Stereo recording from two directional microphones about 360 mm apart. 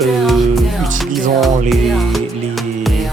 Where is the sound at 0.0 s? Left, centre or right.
Centre.